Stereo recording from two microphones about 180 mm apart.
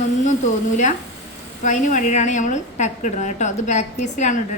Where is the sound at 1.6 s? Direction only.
45° left (ahead or behind).